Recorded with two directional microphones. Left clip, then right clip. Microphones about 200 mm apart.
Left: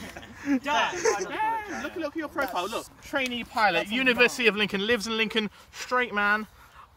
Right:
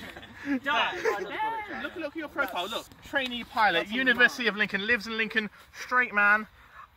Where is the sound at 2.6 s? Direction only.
30° right (ahead or behind).